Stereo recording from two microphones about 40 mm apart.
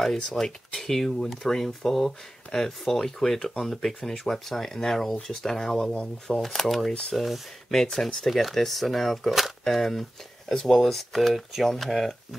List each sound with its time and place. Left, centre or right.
0.0 s speech: centre
6.3 s speech: centre
6.9 s speech: left
7.2 s speech: centre